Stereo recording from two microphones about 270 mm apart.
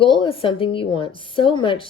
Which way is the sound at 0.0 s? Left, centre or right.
Centre.